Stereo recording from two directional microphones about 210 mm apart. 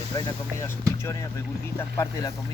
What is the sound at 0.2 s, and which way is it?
Speech, 20° left (ahead or behind).